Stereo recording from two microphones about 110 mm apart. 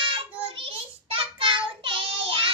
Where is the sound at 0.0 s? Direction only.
55° right (ahead or behind).